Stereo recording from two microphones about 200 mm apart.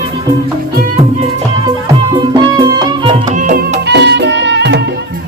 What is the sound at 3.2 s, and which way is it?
Music, 40° right (ahead or behind).